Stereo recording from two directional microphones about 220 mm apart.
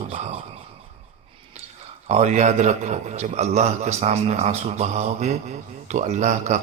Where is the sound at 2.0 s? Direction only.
30° right (ahead or behind).